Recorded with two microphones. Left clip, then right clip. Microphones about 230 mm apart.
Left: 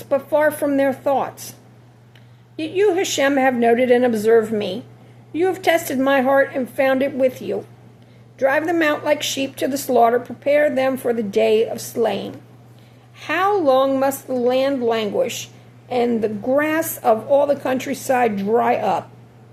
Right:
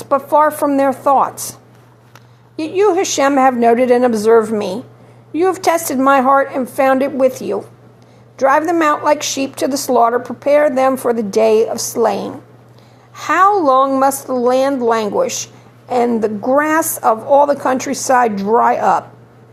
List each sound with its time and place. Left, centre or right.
0.0 s a woman's voice: centre
2.6 s a woman's voice: centre
16.5 s a woman's voice: right